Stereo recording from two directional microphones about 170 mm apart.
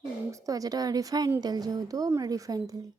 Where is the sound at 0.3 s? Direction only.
20° right (ahead or behind).